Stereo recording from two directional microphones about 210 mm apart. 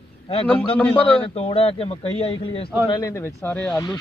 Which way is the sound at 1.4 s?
30° left (ahead or behind).